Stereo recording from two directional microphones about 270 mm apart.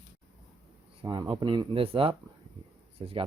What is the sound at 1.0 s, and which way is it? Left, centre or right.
Speech, centre.